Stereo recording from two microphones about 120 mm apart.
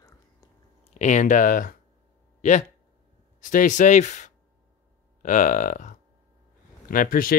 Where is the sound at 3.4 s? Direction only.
90° left.